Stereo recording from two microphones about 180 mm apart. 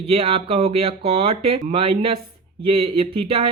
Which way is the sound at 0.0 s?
30° right (ahead or behind).